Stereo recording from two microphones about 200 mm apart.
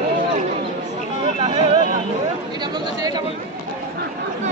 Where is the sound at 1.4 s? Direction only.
30° right (ahead or behind).